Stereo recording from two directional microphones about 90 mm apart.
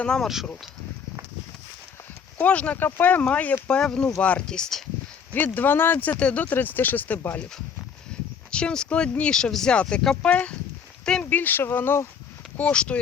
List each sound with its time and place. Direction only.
0.0 s speech: 10° left (ahead or behind)
2.4 s speech: 15° left (ahead or behind)
5.3 s speech: 20° left (ahead or behind)
8.1 s a sound: 10° left (ahead or behind)
8.4 s speech: 10° left (ahead or behind)
11.3 s speech: 20° left (ahead or behind)
12.5 s speech: 15° left (ahead or behind)